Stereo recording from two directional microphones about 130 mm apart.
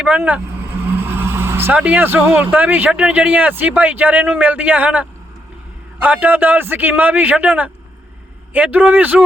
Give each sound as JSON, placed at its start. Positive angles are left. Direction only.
{"t": 0.0, "sound": "vehicle", "side_deg": -10}
{"t": 2.6, "sound": "speech", "side_deg": -10}